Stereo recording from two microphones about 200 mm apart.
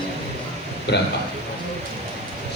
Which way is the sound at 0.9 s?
60° left (ahead or behind).